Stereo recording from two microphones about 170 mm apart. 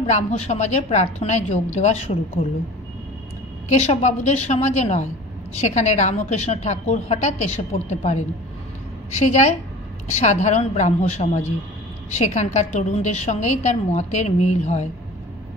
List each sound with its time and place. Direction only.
0.0 s a woman's voice: 40° left (ahead or behind)
3.6 s a woman's voice: 40° left (ahead or behind)
9.2 s a woman's voice: 45° left (ahead or behind)